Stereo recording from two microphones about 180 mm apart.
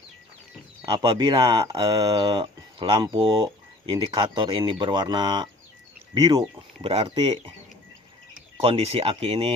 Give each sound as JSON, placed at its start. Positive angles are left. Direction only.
{"t": 0.9, "sound": "speech", "side_deg": -25}
{"t": 6.8, "sound": "speech", "side_deg": -35}
{"t": 8.6, "sound": "speech", "side_deg": -35}